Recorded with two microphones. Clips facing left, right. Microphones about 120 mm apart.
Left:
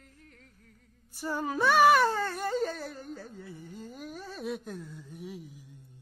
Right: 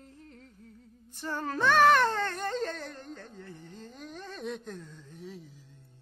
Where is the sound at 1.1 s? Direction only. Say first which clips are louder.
Left 2 dB; 10° left (ahead or behind).